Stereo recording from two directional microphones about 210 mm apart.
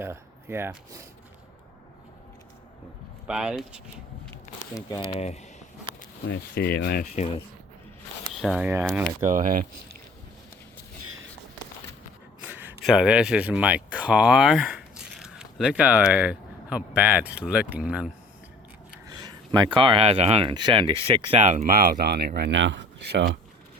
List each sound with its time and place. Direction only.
0.0 s speech: 10° right (ahead or behind)
3.2 s speech: 5° right (ahead or behind)
4.7 s speech: 20° left (ahead or behind)
5.2 s a sound: 30° left (ahead or behind)
6.2 s speech: 55° left (ahead or behind)
8.4 s speech: 5° right (ahead or behind)
9.3 s speech: 40° right (ahead or behind)
11.0 s a sound: 75° right (ahead or behind)
12.4 s speech: 10° right (ahead or behind)
19.0 s a sound: 20° right (ahead or behind)
19.5 s speech: 20° right (ahead or behind); by 23.4 s 55° right (ahead or behind)